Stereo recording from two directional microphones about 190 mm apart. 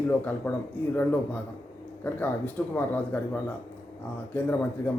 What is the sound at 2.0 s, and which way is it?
A man's voice, 10° left (ahead or behind).